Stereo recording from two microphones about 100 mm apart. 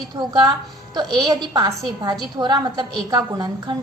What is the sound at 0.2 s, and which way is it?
A woman's voice, 45° right (ahead or behind).